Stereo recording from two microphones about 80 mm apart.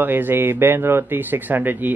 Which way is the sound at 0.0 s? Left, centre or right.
Right.